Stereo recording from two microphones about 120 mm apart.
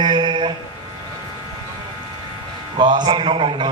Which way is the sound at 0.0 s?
40° right (ahead or behind).